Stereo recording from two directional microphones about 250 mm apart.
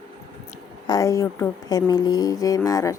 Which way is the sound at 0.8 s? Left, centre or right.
Centre.